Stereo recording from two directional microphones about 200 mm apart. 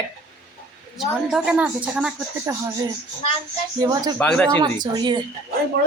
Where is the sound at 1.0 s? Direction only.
5° right (ahead or behind).